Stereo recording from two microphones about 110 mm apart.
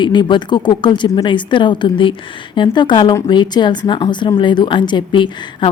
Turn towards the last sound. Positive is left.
turn(degrees=50)  # may be behind; listen again after turning